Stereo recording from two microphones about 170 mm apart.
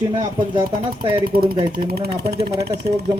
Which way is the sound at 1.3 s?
60° right (ahead or behind).